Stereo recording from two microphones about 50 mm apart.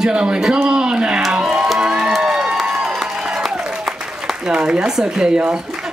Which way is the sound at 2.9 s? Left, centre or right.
Centre.